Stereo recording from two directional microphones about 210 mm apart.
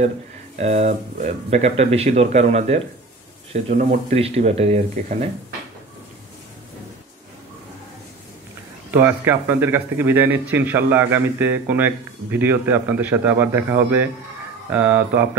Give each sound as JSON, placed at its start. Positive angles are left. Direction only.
{"t": 0.6, "sound": "speech", "side_deg": -35}
{"t": 8.9, "sound": "speech", "side_deg": -10}